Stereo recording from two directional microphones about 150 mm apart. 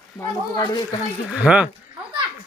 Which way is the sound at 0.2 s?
30° left (ahead or behind).